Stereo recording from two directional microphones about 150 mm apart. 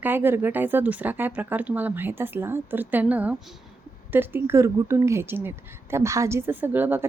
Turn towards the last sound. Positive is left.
turn(degrees=-15)  # may be behind; listen again after turning